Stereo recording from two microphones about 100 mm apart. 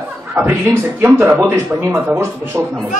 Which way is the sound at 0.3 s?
20° right (ahead or behind).